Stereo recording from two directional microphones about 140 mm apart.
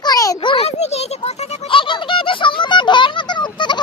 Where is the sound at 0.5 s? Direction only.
50° left (ahead or behind).